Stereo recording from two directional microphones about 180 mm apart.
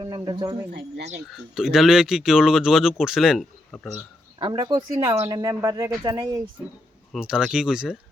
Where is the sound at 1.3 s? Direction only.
Centre (ahead or behind).